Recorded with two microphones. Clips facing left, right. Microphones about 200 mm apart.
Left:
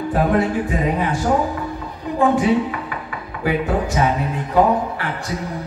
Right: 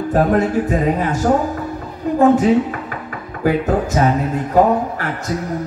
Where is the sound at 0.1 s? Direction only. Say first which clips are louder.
Right 3 dB; 45° right (ahead or behind).